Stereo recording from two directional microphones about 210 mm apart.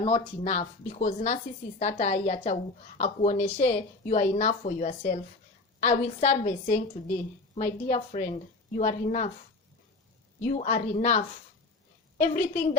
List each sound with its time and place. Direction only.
0.0 s a woman's voice: 30° left (ahead or behind)
10.4 s a woman's voice: 35° left (ahead or behind)